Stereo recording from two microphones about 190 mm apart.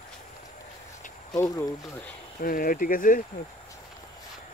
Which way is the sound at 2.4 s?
50° left (ahead or behind).